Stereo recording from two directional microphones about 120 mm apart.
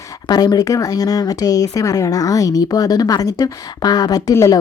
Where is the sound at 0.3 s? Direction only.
35° left (ahead or behind).